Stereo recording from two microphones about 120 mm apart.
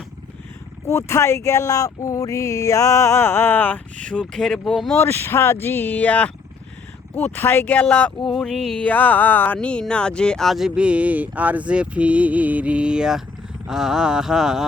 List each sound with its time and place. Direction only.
0.9 s speech: 25° left (ahead or behind); by 4.9 s 5° left (ahead or behind)
4.9 s speech: 20° left (ahead or behind); by 14.6 s 5° right (ahead or behind)